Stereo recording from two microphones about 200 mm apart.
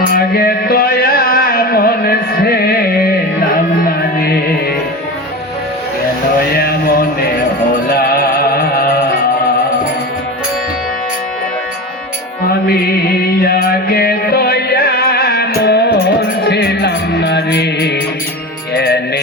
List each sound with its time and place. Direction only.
0.1 s music: 50° left (ahead or behind)
6.5 s music: 50° left (ahead or behind)
13.4 s music: 50° left (ahead or behind)